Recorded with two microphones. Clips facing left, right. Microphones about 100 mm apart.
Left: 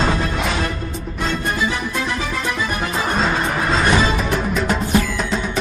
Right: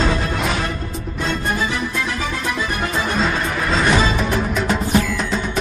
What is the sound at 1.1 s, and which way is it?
Music, centre (ahead or behind).